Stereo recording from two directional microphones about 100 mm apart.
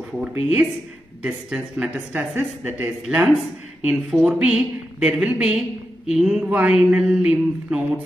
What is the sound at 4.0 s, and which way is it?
Speech, 5° right (ahead or behind).